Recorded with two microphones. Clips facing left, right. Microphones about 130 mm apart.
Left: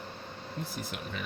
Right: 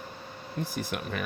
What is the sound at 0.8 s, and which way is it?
Speech, 65° right (ahead or behind).